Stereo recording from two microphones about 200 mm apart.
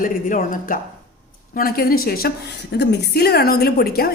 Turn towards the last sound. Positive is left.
turn(degrees=50)  # may be behind; listen again after turning